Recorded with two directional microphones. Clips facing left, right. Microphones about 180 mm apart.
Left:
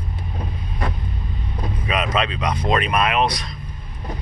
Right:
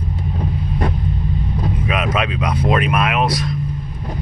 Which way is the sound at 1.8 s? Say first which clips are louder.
Even; 5° right (ahead or behind).